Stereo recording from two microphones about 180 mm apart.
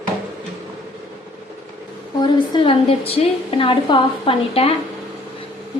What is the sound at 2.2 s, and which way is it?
A woman's voice, 25° left (ahead or behind).